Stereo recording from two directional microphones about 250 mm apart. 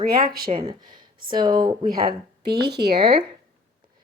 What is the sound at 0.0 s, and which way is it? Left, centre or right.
Speech, right.